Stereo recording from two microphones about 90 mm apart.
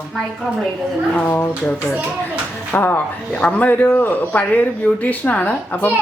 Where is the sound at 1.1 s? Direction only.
20° left (ahead or behind).